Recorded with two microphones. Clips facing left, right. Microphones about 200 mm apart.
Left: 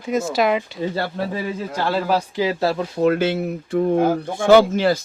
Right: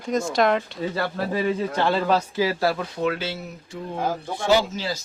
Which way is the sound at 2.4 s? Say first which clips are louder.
Left 2 dB; 25° left (ahead or behind).